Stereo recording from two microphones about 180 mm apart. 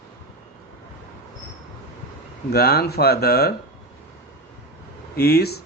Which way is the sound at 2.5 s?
60° left (ahead or behind).